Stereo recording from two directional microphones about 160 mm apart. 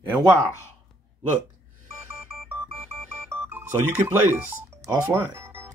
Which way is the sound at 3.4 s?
15° right (ahead or behind).